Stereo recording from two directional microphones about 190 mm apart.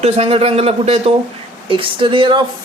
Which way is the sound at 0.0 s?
30° right (ahead or behind).